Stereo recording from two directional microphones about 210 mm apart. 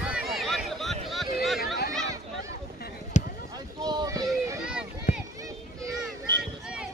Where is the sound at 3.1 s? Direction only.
35° left (ahead or behind).